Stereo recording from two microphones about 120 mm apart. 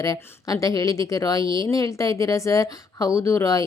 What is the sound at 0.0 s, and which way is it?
Speech, 30° left (ahead or behind).